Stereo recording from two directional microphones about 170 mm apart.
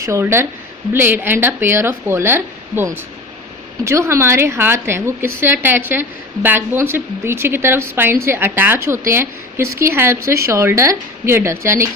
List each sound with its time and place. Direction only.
0.0 s a woman's voice: 15° right (ahead or behind)